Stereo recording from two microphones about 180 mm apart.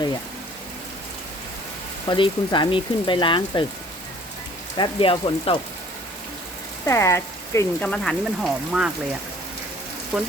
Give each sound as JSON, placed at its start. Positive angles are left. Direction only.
{"t": 2.0, "sound": "speech", "side_deg": 25}
{"t": 4.8, "sound": "speech", "side_deg": 30}
{"t": 6.8, "sound": "speech", "side_deg": 15}
{"t": 7.9, "sound": "speech", "side_deg": 5}
{"t": 10.1, "sound": "speech", "side_deg": 0}